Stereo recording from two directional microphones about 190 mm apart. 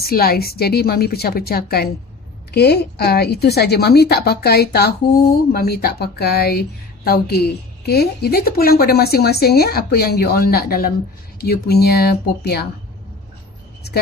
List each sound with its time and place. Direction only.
0.0 s a woman's voice: 55° left (ahead or behind)